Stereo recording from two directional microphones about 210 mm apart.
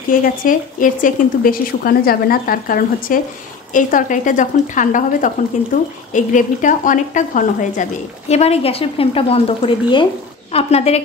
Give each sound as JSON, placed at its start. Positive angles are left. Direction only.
{"t": 0.1, "sound": "a woman's voice", "side_deg": 40}